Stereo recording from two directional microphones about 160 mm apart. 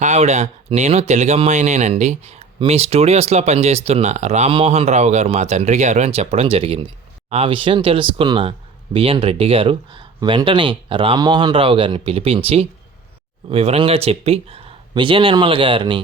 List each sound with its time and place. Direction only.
0.0 s speech: 45° right (ahead or behind)